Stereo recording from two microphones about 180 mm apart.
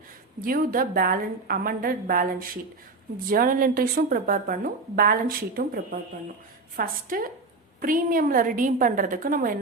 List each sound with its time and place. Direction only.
0.4 s a woman's voice: 50° right (ahead or behind)